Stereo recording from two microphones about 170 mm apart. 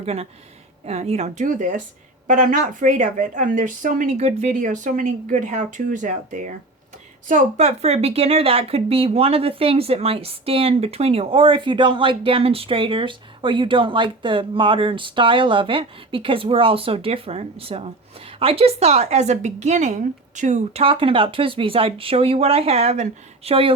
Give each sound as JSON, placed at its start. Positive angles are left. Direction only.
{"t": 0.0, "sound": "a woman's voice", "side_deg": -35}